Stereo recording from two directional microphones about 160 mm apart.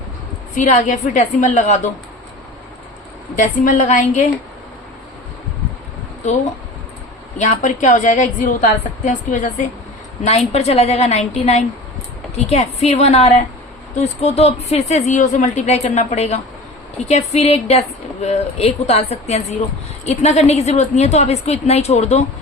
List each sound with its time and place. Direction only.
0.5 s speech: 50° left (ahead or behind)
3.3 s speech: 50° left (ahead or behind)
6.2 s speech: 50° left (ahead or behind)